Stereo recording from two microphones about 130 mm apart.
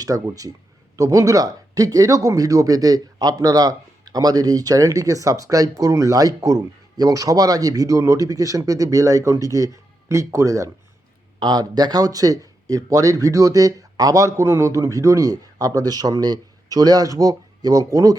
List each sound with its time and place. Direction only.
0.0 s speech: 25° right (ahead or behind)